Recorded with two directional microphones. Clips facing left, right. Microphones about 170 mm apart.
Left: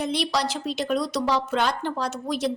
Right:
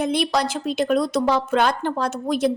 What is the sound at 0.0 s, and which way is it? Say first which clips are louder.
A woman's voice: right 4 dB; 50° right (ahead or behind).